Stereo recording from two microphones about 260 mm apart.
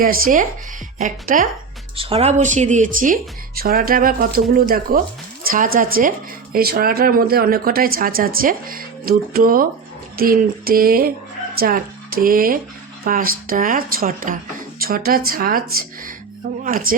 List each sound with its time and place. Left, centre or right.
0.0 s a woman's voice: right
16.6 s speech: right